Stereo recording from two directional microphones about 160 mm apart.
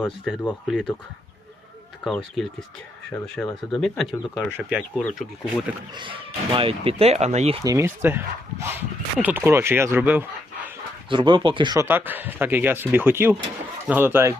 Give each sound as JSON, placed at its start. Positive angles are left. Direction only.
{"t": 0.3, "sound": "speech", "side_deg": -5}
{"t": 2.0, "sound": "speech", "side_deg": 0}
{"t": 5.9, "sound": "speech", "side_deg": -30}
{"t": 7.6, "sound": "speech", "side_deg": -20}
{"t": 11.1, "sound": "speech", "side_deg": -30}
{"t": 11.9, "sound": "speech", "side_deg": -10}